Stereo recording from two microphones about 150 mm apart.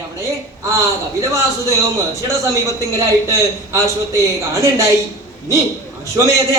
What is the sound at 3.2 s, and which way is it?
A man's voice, 20° right (ahead or behind).